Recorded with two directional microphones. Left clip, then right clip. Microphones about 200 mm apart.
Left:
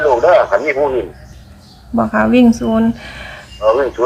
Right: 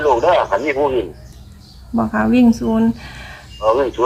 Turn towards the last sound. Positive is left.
turn(degrees=-45)  # may be behind; listen again after turning